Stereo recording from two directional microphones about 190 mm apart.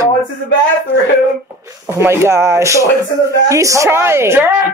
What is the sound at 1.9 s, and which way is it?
Speech, 15° right (ahead or behind).